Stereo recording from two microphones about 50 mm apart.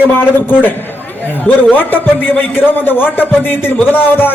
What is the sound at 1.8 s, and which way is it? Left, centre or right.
A man's voice, left.